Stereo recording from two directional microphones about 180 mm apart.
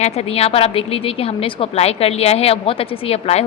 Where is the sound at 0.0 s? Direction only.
35° left (ahead or behind).